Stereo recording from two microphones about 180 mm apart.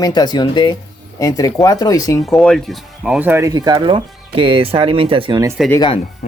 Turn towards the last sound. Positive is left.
turn(degrees=25)  # may be behind; listen again after turning